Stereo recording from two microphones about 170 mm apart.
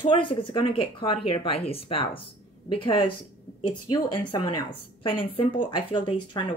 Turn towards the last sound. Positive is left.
turn(degrees=30)  # may be behind; listen again after turning